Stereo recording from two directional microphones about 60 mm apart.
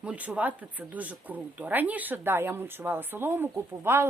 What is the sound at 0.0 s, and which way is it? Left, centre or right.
Speech, right.